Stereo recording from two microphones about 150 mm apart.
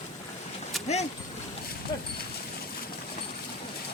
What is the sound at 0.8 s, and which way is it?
Speech, 45° left (ahead or behind).